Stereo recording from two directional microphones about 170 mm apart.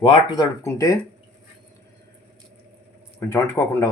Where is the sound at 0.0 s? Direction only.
25° left (ahead or behind).